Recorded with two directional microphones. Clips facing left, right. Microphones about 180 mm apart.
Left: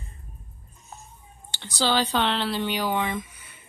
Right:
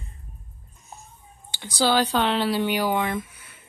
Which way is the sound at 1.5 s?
10° right (ahead or behind).